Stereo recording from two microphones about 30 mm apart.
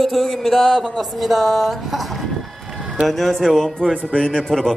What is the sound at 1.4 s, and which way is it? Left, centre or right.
Speech, centre.